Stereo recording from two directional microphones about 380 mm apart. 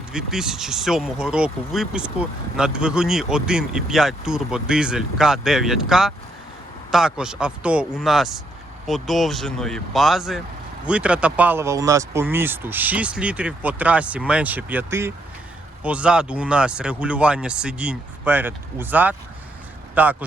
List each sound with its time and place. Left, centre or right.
0.1 s speech: centre